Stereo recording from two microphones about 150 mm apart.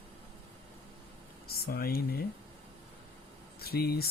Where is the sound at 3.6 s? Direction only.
90° left.